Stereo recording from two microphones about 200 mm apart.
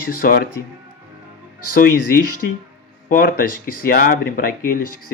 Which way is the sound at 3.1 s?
45° left (ahead or behind).